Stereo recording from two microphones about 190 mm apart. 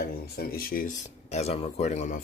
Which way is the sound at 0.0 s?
55° left (ahead or behind).